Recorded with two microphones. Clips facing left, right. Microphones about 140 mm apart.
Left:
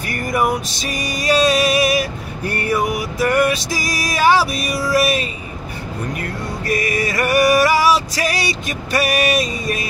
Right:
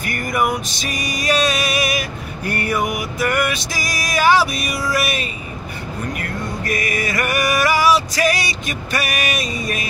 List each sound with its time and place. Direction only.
0.0 s music: 30° left (ahead or behind)
6.6 s music: 30° left (ahead or behind)